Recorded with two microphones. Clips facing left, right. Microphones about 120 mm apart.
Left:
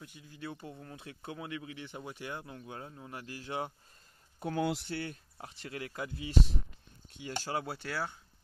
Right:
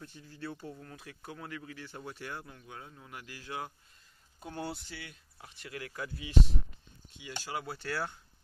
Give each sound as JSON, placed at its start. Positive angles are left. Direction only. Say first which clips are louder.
{"t": 0.0, "sound": "speech", "louder": "right 1 dB", "side_deg": 15}
{"t": 2.5, "sound": "speech", "louder": "left 4 dB", "side_deg": 35}
{"t": 4.4, "sound": "speech", "louder": "left 7 dB", "side_deg": 85}
{"t": 5.6, "sound": "speech", "louder": "left 1 dB", "side_deg": 25}
{"t": 7.2, "sound": "speech", "louder": "left 3 dB", "side_deg": 35}